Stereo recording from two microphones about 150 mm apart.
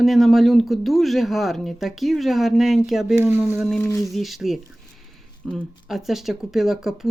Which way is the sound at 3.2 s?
15° right (ahead or behind).